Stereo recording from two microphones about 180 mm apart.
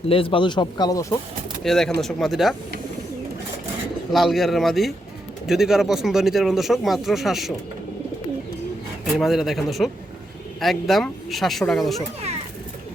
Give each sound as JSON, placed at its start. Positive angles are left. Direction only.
{"t": 0.1, "sound": "speech", "side_deg": 30}
{"t": 1.6, "sound": "speech", "side_deg": 0}
{"t": 4.1, "sound": "speech", "side_deg": 0}
{"t": 9.1, "sound": "speech", "side_deg": 0}